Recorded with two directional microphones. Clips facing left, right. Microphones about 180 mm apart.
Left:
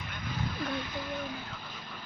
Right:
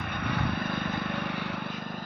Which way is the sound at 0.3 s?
65° right (ahead or behind).